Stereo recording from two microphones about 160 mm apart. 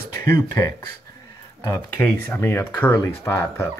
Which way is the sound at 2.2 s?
15° left (ahead or behind).